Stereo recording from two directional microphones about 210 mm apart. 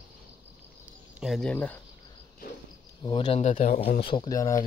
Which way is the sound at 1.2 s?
Centre (ahead or behind).